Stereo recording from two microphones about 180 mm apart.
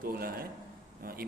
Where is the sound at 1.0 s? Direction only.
55° right (ahead or behind).